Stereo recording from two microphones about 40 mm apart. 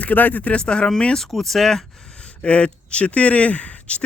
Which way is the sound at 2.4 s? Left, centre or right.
Left.